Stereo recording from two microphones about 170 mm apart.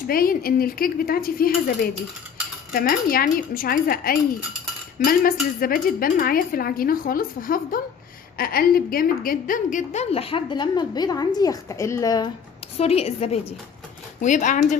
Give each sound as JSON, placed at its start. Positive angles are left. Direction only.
{"t": 0.1, "sound": "a woman's voice", "side_deg": 60}
{"t": 12.7, "sound": "a woman's voice", "side_deg": 35}